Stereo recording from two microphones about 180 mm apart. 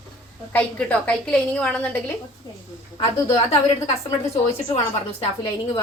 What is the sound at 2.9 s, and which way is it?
Speech, 30° left (ahead or behind).